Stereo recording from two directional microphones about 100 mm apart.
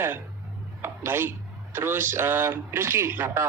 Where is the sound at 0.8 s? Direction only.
25° right (ahead or behind).